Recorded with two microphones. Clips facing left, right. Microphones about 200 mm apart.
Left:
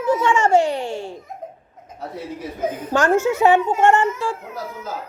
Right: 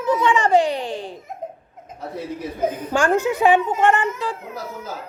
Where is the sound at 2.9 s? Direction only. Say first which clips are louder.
Left 3 dB; 15° right (ahead or behind).